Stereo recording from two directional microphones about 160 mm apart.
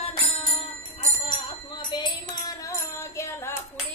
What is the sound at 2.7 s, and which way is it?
Music, 15° left (ahead or behind).